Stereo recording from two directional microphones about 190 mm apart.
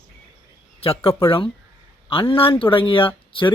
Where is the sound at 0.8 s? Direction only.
30° left (ahead or behind).